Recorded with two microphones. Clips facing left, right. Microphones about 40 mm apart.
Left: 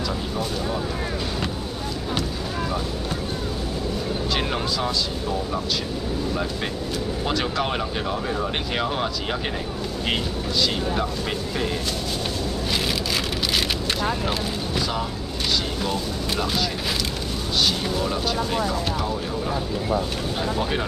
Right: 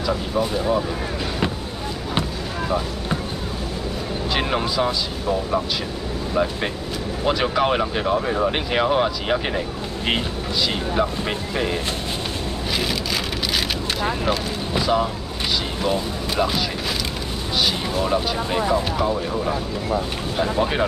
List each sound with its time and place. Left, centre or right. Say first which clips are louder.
4.3 s speech: right 5 dB; centre
6.3 s speech: right 4 dB; centre
11.0 s speech: right 3 dB; centre
14.7 s vehicle: right 8 dB; centre
15.8 s speech: right 3 dB; centre
17.6 s a sound: right 1 dB; centre
18.0 s speech: right 3 dB; right
20.5 s speech: right 4 dB; centre